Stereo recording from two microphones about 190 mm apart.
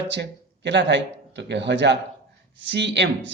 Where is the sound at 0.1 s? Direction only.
65° right (ahead or behind).